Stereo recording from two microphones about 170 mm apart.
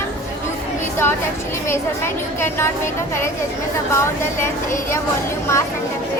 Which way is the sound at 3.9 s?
15° left (ahead or behind).